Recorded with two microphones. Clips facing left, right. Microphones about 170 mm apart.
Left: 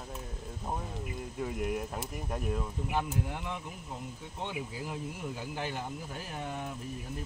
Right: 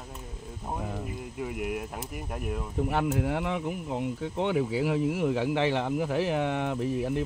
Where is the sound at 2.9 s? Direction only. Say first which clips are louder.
Right 6 dB; 70° right (ahead or behind).